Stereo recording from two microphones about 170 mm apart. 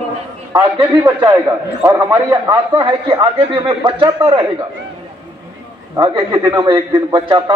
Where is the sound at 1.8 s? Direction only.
20° right (ahead or behind).